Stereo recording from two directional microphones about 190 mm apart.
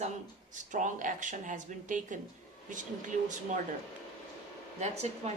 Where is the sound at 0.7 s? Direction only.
40° right (ahead or behind).